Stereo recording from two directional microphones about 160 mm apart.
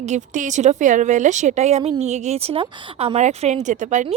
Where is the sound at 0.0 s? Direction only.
50° right (ahead or behind).